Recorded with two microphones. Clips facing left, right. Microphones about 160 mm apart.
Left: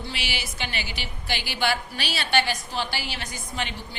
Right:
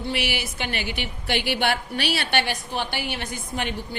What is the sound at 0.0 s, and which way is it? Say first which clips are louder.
A woman's voice: right 6 dB; 60° right (ahead or behind).